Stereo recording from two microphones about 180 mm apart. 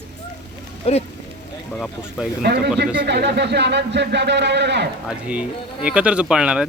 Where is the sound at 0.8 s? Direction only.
35° left (ahead or behind).